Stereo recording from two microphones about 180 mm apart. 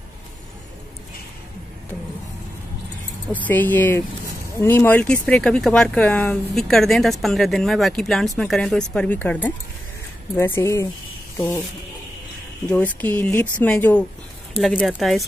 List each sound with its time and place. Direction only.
3.3 s speech: 10° left (ahead or behind)
12.6 s speech: 10° left (ahead or behind)